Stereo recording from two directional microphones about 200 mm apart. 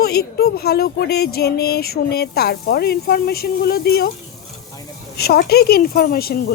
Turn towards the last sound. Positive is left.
turn(degrees=50)  # may be behind; listen again after turning